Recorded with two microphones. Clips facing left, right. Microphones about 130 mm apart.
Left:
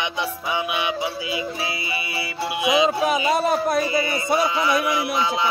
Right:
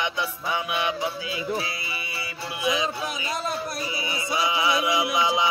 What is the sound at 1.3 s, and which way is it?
Music, 85° left.